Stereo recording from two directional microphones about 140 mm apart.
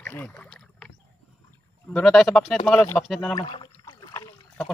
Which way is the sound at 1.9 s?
5° left (ahead or behind).